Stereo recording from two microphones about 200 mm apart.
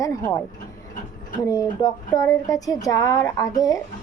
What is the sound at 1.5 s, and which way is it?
A woman's voice, 15° left (ahead or behind).